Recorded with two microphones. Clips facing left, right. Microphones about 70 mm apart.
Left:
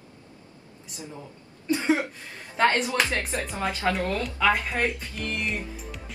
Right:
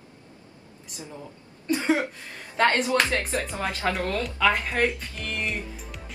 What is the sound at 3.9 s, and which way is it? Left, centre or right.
Speech, centre.